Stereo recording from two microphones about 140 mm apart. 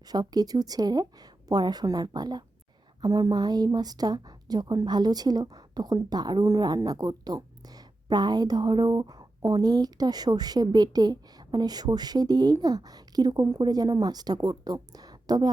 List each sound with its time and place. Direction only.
0.1 s a woman's voice: 30° right (ahead or behind)